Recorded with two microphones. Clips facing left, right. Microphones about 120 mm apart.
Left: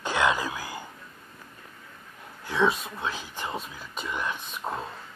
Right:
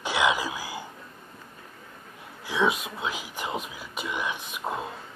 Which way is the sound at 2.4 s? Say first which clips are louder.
Left 1 dB; 5° right (ahead or behind).